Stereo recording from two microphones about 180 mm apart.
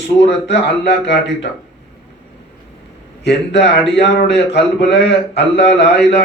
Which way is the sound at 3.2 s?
70° left (ahead or behind).